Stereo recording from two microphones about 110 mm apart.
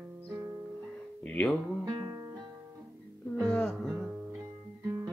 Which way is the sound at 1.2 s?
15° left (ahead or behind).